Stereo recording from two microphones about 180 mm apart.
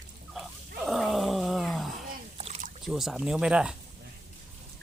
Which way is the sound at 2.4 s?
35° right (ahead or behind).